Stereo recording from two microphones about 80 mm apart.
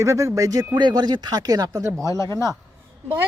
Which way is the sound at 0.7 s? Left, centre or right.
Right.